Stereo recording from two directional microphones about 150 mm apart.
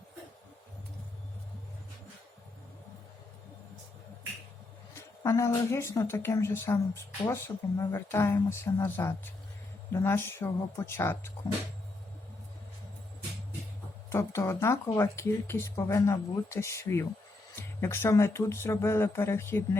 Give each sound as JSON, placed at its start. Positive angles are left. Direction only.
{"t": 4.9, "sound": "speech", "side_deg": 20}
{"t": 14.1, "sound": "speech", "side_deg": 20}